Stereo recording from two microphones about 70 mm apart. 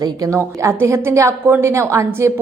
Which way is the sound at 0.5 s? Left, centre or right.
Right.